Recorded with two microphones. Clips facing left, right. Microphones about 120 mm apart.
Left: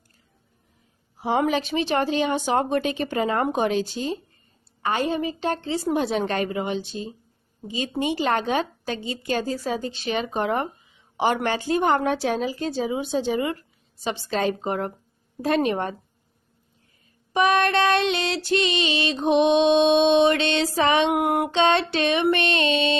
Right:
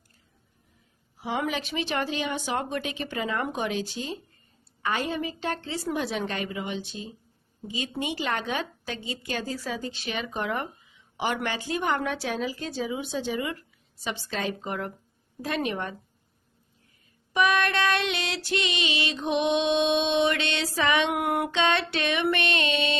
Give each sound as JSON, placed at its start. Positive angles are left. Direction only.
{"t": 1.2, "sound": "a woman's voice", "side_deg": 35}
{"t": 17.3, "sound": "a woman's voice", "side_deg": 30}
{"t": 20.6, "sound": "a sound", "side_deg": 35}